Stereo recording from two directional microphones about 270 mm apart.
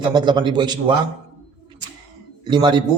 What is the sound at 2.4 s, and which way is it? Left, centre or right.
Speech, centre.